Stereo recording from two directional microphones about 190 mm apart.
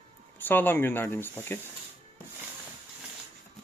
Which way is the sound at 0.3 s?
10° left (ahead or behind).